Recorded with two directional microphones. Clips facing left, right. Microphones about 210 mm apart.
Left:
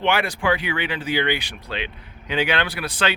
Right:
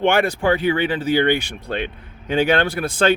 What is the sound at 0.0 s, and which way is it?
Speech, 45° right (ahead or behind).